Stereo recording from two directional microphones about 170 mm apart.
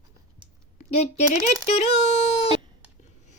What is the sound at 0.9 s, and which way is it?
A woman's voice, 40° left (ahead or behind).